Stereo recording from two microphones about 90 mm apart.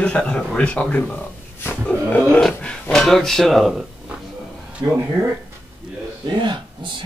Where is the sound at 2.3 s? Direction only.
5° left (ahead or behind).